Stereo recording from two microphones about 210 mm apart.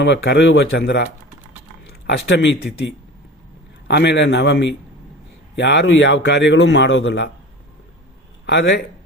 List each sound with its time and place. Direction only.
0.0 s a man's voice: 60° left (ahead or behind)
3.8 s a man's voice: 55° left (ahead or behind)
8.4 s a man's voice: 55° left (ahead or behind)